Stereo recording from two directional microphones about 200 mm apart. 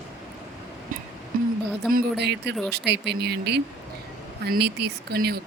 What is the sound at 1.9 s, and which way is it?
Speech, 50° right (ahead or behind).